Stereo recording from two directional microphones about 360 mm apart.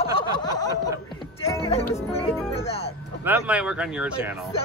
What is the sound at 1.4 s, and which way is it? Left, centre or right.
Music, centre.